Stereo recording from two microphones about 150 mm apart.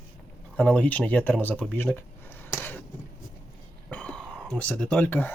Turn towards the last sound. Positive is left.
turn(degrees=10)  # may be behind; listen again after turning